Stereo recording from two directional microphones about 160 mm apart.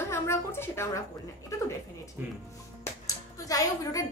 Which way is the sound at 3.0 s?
20° left (ahead or behind).